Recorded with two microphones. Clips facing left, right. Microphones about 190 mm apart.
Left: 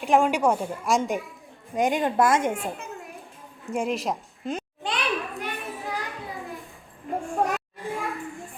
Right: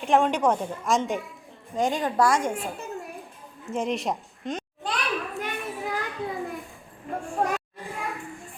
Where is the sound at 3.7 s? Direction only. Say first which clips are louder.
Left 1 dB; 5° left (ahead or behind).